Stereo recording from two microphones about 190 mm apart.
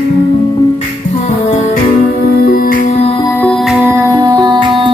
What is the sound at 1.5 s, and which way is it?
Music, 40° left (ahead or behind).